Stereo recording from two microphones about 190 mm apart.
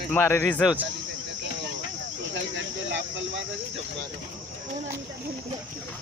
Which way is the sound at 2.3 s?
70° right (ahead or behind).